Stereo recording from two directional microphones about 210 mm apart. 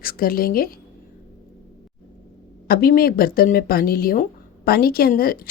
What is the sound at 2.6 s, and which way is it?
Speech, 45° left (ahead or behind).